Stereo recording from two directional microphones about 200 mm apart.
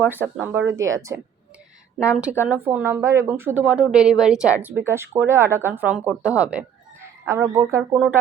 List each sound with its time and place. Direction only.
0.0 s a woman's voice: 10° right (ahead or behind)
7.9 s speech: centre (ahead or behind)